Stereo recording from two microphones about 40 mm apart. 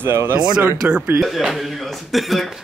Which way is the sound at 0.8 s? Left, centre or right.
Right.